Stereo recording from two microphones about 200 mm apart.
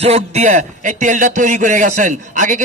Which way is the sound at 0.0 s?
35° right (ahead or behind).